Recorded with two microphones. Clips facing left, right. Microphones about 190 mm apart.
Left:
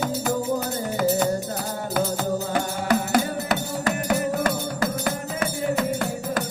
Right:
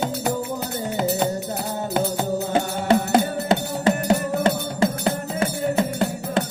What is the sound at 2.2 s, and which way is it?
Music, 25° right (ahead or behind).